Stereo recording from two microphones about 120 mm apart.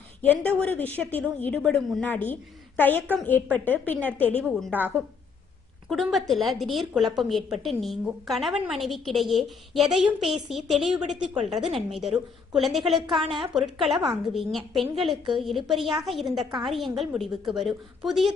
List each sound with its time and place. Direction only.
0.2 s a woman's voice: 15° left (ahead or behind)
4.4 s a woman's voice: centre (ahead or behind)
4.7 s a woman's voice: 15° right (ahead or behind)
5.9 s a woman's voice: centre (ahead or behind)